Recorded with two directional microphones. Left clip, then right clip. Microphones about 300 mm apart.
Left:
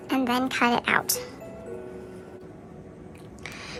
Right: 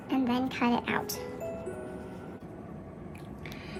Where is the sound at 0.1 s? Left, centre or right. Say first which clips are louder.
Left 5 dB; centre.